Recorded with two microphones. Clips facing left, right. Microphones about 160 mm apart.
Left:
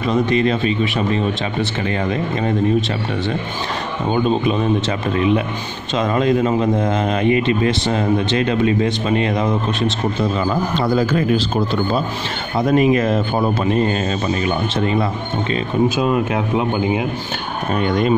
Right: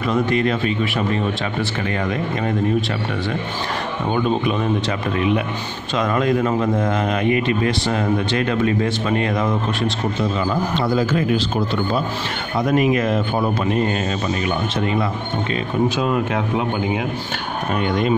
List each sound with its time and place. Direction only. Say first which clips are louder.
0.1 s speech: left 2 dB; 25° left (ahead or behind)
4.1 s speech: left 3 dB; 25° left (ahead or behind)
5.9 s speech: left 2 dB; 25° left (ahead or behind)
10.8 s speech: left 2 dB; 40° left (ahead or behind)
12.5 s speech: left 3 dB; 30° left (ahead or behind)
16.0 s speech: left 2 dB; 20° left (ahead or behind)